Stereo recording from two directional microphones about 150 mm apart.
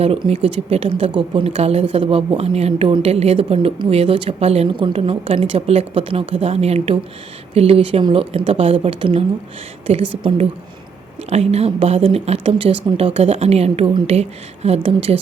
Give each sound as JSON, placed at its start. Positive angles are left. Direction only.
{"t": 0.0, "sound": "a woman's voice", "side_deg": -40}